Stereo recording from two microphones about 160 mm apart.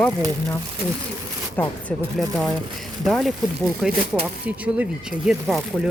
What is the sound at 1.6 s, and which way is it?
Speech, 10° left (ahead or behind).